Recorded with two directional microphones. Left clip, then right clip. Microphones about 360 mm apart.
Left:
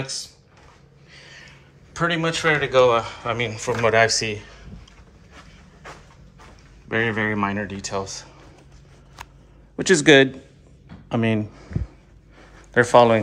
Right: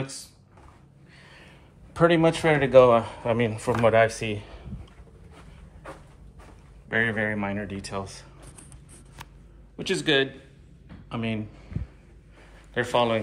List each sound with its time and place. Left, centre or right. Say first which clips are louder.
2.0 s speech: right 2 dB; centre
6.9 s speech: left 3 dB; centre
9.8 s a man's voice: left 10 dB; centre
12.7 s speech: left 9 dB; centre